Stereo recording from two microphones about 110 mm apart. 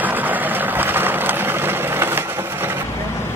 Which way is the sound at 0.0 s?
15° right (ahead or behind).